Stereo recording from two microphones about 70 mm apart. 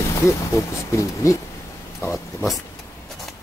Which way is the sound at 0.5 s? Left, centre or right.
Left.